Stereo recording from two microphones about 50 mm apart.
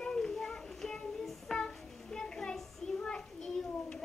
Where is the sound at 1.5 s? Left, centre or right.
Centre.